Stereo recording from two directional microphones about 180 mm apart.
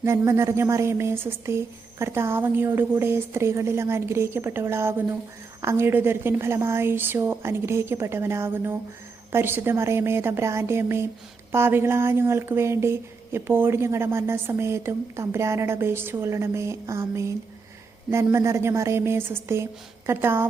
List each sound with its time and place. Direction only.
0.0 s speech: 15° right (ahead or behind)